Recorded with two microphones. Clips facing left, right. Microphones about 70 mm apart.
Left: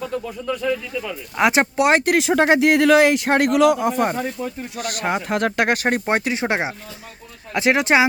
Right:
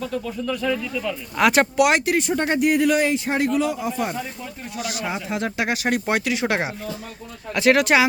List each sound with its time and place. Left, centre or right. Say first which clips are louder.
0.0 s speech: even; centre; by 2.0 s left
2.1 s speech: left 5 dB; left